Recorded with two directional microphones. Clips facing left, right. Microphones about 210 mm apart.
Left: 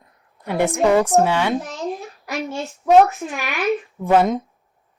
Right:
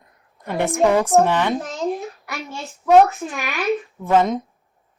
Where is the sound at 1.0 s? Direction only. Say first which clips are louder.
Right 1 dB; 5° left (ahead or behind).